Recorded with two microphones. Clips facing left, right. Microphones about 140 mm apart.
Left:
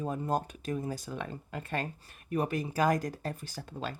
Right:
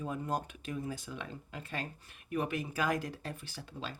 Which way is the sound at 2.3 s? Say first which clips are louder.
Left 3 dB; 40° left (ahead or behind).